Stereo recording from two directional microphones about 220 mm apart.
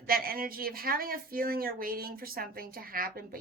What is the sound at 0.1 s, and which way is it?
A woman's voice, 40° right (ahead or behind).